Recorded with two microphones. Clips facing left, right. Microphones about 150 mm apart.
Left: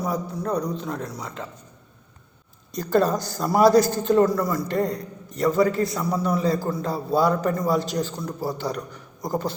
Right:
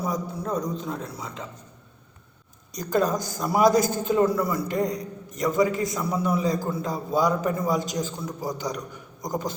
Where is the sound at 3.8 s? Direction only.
50° right (ahead or behind).